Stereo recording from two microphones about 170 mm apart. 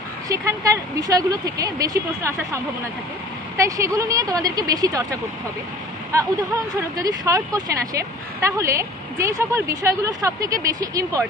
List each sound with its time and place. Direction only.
0.3 s speech: 20° right (ahead or behind)
7.0 s speech: 20° right (ahead or behind)